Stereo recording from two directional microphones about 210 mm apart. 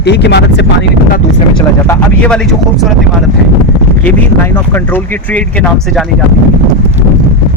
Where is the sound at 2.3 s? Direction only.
5° left (ahead or behind).